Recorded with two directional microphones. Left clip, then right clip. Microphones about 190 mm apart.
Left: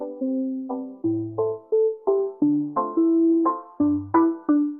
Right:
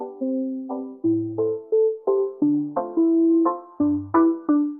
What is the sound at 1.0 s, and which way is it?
Music, centre (ahead or behind).